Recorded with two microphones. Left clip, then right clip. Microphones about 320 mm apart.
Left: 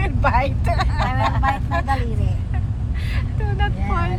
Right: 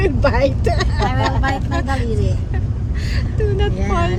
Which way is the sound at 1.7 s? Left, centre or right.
Right.